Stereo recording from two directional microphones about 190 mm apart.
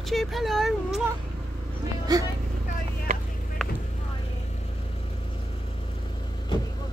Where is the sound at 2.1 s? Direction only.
20° right (ahead or behind).